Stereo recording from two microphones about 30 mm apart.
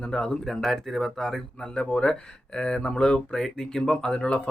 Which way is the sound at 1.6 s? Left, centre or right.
Left.